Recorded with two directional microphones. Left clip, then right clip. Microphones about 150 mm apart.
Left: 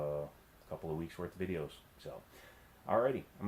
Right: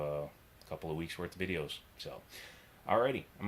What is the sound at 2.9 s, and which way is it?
Speech, 25° right (ahead or behind).